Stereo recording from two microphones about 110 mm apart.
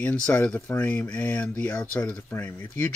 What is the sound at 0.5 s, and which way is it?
Speech, 15° left (ahead or behind).